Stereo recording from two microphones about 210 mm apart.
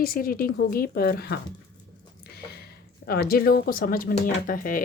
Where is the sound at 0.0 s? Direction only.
45° left (ahead or behind).